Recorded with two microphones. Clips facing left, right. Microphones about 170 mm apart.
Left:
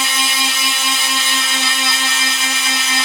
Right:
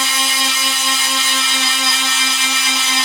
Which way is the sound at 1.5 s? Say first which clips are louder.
Even; centre (ahead or behind).